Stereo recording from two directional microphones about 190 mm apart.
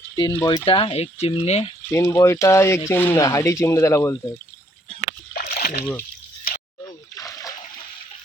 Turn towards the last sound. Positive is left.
turn(degrees=20)  # may be behind; listen again after turning